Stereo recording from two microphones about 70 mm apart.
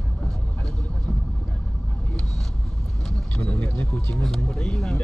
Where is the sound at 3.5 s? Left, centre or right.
Left.